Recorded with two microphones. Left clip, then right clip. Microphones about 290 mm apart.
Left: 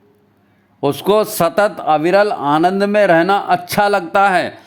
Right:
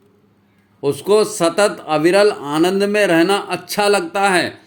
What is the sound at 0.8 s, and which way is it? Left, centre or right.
A man's voice, left.